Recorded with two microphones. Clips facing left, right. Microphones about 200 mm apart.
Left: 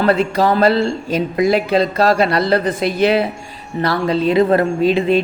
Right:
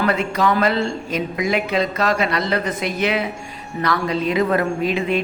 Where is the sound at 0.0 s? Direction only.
35° left (ahead or behind).